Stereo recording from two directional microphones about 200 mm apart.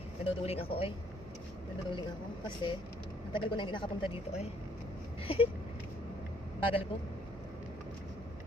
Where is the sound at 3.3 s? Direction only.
25° left (ahead or behind).